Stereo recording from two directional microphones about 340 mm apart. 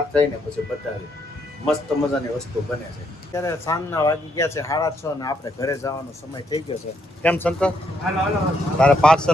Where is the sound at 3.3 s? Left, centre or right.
Centre.